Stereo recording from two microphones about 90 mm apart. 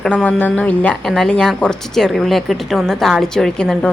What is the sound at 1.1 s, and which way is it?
Speech, 5° left (ahead or behind).